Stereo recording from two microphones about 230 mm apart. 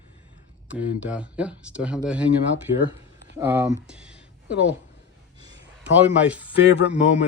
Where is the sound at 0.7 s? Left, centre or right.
Centre.